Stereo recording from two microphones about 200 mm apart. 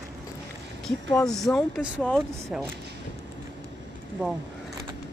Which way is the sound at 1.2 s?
Centre (ahead or behind).